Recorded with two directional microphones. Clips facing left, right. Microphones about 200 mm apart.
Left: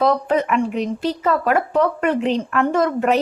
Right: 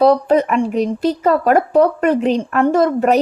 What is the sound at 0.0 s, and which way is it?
Speech, 35° right (ahead or behind).